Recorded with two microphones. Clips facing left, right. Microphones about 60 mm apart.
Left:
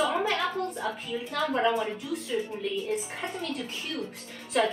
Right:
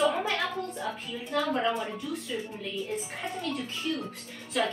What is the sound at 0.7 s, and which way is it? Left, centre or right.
Speech, centre.